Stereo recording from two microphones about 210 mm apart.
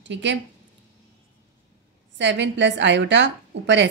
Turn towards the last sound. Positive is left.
turn(degrees=-55)  # may be behind; listen again after turning